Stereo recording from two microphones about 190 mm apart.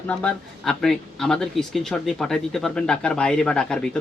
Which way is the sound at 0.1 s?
5° left (ahead or behind).